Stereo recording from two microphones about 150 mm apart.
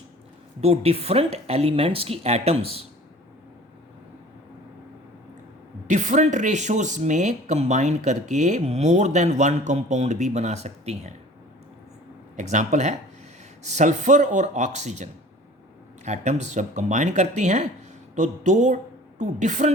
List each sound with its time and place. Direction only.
0.6 s speech: 45° right (ahead or behind)
5.9 s speech: 55° right (ahead or behind)
12.4 s speech: 55° right (ahead or behind)